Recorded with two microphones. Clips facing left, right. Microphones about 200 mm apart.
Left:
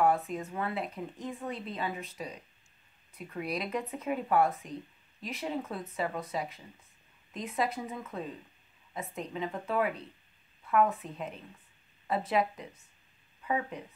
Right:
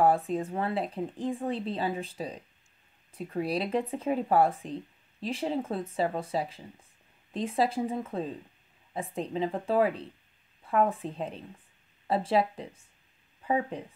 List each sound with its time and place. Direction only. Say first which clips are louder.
0.0 s speech: right 3 dB; 30° right (ahead or behind)